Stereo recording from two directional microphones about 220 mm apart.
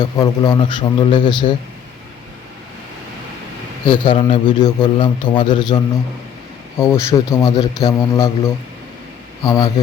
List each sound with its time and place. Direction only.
0.0 s a man's voice: 20° left (ahead or behind)
3.8 s a man's voice: 20° left (ahead or behind)
9.4 s a man's voice: 15° left (ahead or behind)